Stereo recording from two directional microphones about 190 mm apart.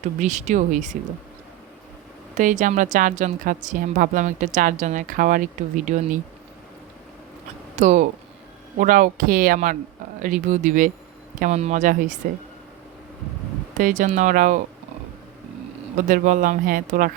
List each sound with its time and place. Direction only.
0.0 s a woman's voice: 40° right (ahead or behind)
2.3 s a woman's voice: 40° right (ahead or behind)
7.8 s a woman's voice: 40° right (ahead or behind)
13.7 s speech: 45° right (ahead or behind)
16.0 s speech: 45° right (ahead or behind)